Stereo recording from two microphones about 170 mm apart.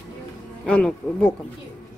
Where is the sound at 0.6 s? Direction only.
5° left (ahead or behind).